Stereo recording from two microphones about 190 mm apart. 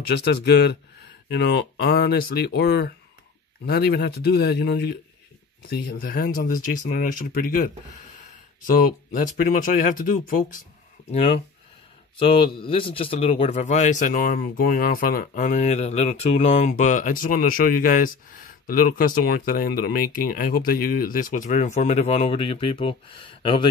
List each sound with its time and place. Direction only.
0.1 s speech: 60° left (ahead or behind); by 10.6 s 45° left (ahead or behind)
11.1 s speech: 30° left (ahead or behind)